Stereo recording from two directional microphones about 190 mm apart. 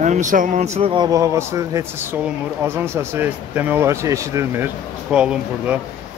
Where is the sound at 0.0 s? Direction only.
40° right (ahead or behind).